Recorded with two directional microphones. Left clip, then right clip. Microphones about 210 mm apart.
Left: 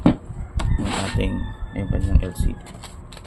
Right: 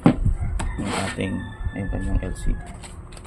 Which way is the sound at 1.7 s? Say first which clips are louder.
Left 2 dB; 20° left (ahead or behind).